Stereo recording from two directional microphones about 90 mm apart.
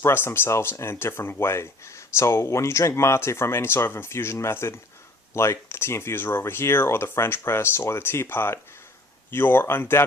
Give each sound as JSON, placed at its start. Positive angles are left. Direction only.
{"t": 0.0, "sound": "speech", "side_deg": 30}